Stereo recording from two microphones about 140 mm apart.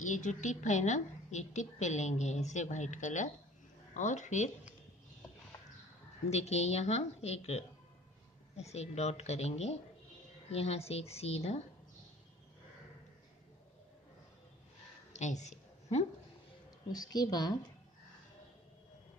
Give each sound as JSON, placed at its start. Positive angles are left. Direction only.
{"t": 0.0, "sound": "a woman's voice", "side_deg": 60}
{"t": 6.3, "sound": "speech", "side_deg": 50}
{"t": 15.1, "sound": "a sound", "side_deg": 55}
{"t": 16.9, "sound": "a woman's voice", "side_deg": 30}